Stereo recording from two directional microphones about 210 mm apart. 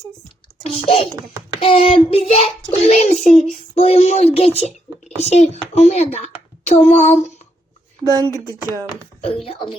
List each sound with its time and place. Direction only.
0.6 s a sound: 25° left (ahead or behind)
1.6 s speech: 25° left (ahead or behind)
9.2 s speech: 30° left (ahead or behind)